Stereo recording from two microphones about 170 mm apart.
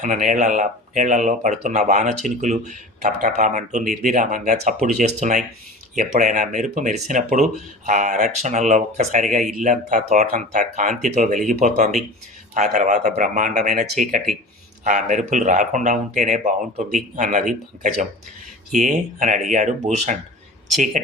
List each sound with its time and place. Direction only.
0.0 s speech: 50° right (ahead or behind)
18.7 s speech: 45° right (ahead or behind)